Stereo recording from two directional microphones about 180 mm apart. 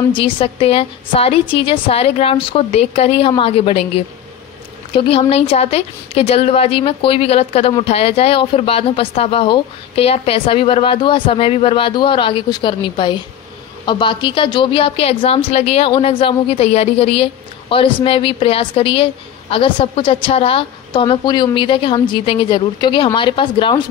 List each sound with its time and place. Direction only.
0.1 s a woman's voice: 30° left (ahead or behind)